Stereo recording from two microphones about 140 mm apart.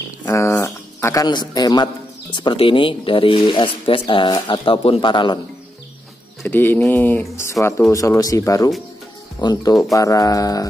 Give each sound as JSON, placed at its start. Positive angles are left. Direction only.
{"t": 0.2, "sound": "a sound", "side_deg": 20}
{"t": 1.0, "sound": "a man's voice", "side_deg": 25}
{"t": 6.4, "sound": "a man's voice", "side_deg": 15}